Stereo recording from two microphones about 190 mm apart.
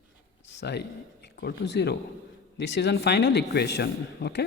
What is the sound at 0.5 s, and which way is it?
Speech, 60° left (ahead or behind).